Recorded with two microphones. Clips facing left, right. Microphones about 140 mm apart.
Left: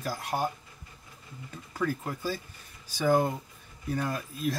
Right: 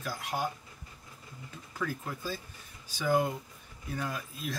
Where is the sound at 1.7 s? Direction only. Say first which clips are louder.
Left 5 dB; 45° left (ahead or behind).